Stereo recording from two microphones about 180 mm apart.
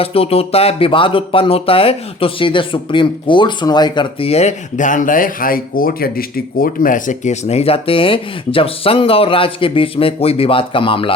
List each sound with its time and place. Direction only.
0.0 s speech: 30° left (ahead or behind)